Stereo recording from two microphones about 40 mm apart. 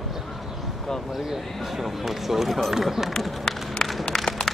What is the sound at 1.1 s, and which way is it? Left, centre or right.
Speech, centre.